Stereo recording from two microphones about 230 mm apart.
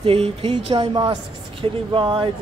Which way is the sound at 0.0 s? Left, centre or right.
Right.